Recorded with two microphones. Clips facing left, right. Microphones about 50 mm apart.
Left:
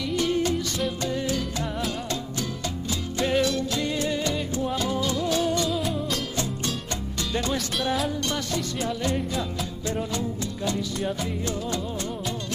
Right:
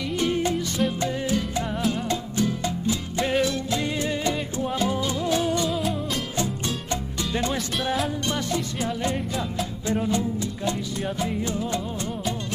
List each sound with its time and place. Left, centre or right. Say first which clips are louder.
0.2 s music: right 1 dB; right
5.7 s music: right 1 dB; centre
10.0 s music: right 4 dB; right